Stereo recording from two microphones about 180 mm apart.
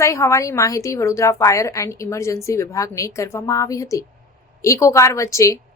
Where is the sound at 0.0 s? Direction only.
15° left (ahead or behind).